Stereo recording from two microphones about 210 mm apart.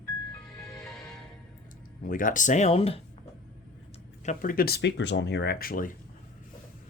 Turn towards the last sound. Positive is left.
turn(degrees=40)  # may be behind; listen again after turning